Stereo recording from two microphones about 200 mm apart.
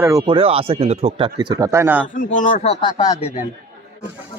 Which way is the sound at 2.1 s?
40° left (ahead or behind).